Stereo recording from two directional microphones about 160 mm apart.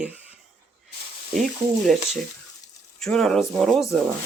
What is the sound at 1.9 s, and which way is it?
Speech, centre (ahead or behind).